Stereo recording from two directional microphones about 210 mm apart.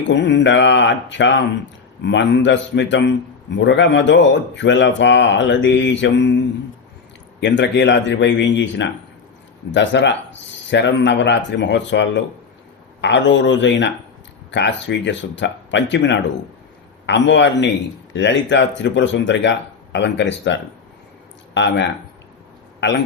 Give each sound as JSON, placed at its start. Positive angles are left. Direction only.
{"t": 0.1, "sound": "speech", "side_deg": 55}
{"t": 7.4, "sound": "speech", "side_deg": 55}